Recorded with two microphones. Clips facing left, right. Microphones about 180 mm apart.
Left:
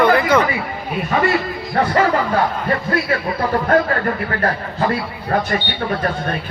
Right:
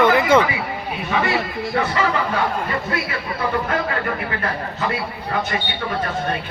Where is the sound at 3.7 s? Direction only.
50° left (ahead or behind).